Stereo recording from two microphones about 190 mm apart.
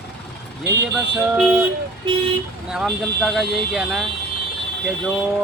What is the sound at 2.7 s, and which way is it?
Speech, 5° right (ahead or behind).